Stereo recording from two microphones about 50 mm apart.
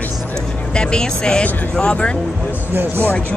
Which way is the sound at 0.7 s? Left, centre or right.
Centre.